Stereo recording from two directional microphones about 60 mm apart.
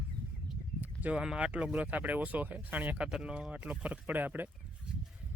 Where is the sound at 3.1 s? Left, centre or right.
Centre.